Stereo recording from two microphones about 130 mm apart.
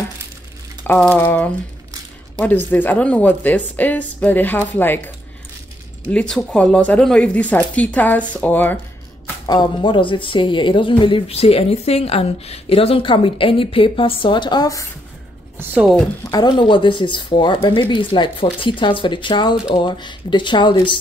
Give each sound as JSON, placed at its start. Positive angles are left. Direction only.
{"t": 0.8, "sound": "speech", "side_deg": 10}
{"t": 6.1, "sound": "speech", "side_deg": 5}
{"t": 9.5, "sound": "speech", "side_deg": 35}
{"t": 16.3, "sound": "speech", "side_deg": 30}